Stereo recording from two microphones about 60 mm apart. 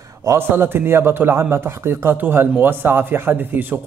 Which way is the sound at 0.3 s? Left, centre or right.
Right.